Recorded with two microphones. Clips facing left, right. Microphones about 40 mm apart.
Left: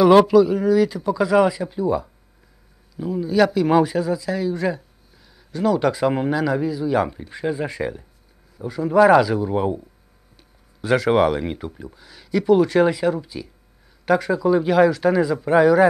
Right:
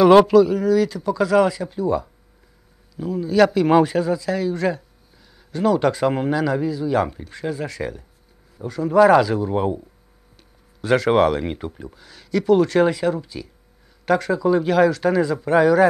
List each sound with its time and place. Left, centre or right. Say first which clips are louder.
0.3 s speech: even; centre
3.5 s speech: right 1 dB; centre
7.3 s speech: left 3 dB; centre
8.6 s speech: even; centre
10.3 s a sound: even; centre
11.5 s speech: right 1 dB; centre